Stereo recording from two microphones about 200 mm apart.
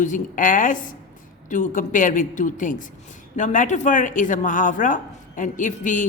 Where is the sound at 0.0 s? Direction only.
40° left (ahead or behind).